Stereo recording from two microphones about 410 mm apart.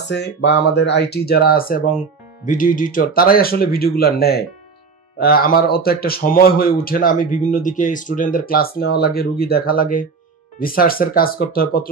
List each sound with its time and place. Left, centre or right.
0.1 s speech: left